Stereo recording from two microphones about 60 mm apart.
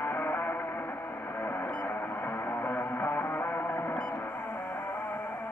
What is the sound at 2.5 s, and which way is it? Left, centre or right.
Music, left.